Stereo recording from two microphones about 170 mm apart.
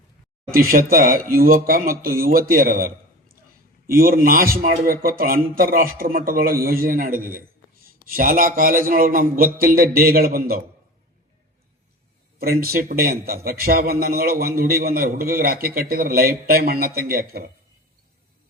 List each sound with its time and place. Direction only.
0.5 s a man's voice: 60° right (ahead or behind)
3.9 s a man's voice: 60° right (ahead or behind)
12.4 s a man's voice: 65° right (ahead or behind)